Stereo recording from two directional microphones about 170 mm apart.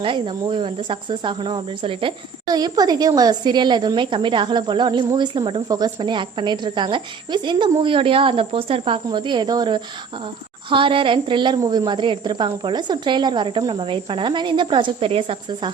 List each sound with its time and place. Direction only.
0.0 s speech: 30° right (ahead or behind)